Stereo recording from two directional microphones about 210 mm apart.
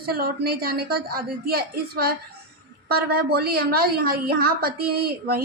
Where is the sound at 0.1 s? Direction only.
45° right (ahead or behind).